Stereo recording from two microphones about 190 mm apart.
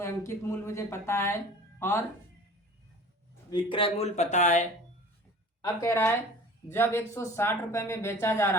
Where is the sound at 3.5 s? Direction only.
25° left (ahead or behind).